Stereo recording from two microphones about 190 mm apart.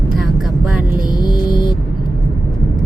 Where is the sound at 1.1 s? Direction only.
20° left (ahead or behind).